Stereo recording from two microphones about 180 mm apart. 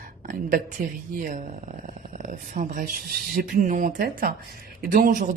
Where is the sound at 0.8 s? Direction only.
50° right (ahead or behind).